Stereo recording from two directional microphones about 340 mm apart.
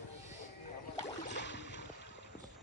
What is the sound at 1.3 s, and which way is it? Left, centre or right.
Boat, left.